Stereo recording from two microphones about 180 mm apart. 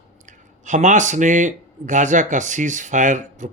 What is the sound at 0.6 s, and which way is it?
Speech, 45° right (ahead or behind).